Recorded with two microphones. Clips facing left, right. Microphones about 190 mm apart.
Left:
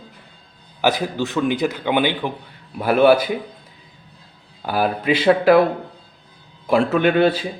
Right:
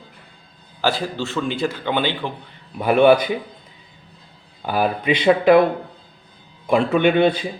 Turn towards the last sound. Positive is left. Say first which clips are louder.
# even
turn(degrees=5)  # may be behind; listen again after turning